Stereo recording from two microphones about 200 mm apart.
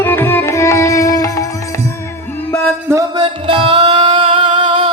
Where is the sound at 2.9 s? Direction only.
20° right (ahead or behind).